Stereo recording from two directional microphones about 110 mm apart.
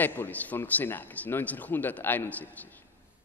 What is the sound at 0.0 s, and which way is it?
Speech, 15° left (ahead or behind).